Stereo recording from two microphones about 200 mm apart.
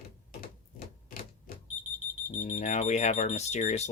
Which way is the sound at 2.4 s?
35° left (ahead or behind).